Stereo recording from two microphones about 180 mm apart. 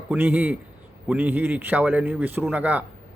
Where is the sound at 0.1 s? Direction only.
10° right (ahead or behind).